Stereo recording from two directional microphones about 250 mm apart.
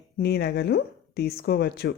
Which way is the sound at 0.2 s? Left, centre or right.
Left.